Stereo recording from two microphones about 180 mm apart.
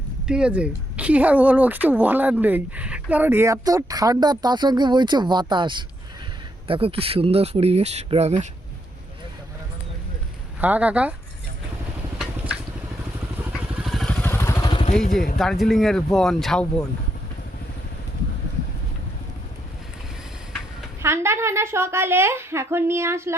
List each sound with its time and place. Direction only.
0.3 s speech: 5° right (ahead or behind); by 8.4 s 40° right (ahead or behind)
10.6 s speech: 10° right (ahead or behind)
13.8 s vehicle: centre (ahead or behind)
14.7 s vehicle: 30° left (ahead or behind)
15.4 s speech: centre (ahead or behind)
21.0 s speech: 15° right (ahead or behind)